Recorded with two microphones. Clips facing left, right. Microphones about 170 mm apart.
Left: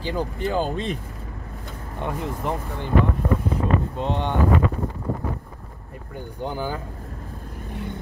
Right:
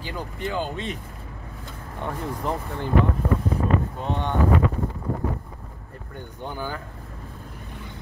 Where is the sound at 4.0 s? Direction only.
20° left (ahead or behind).